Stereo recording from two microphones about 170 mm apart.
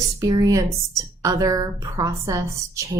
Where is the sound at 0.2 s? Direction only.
25° right (ahead or behind).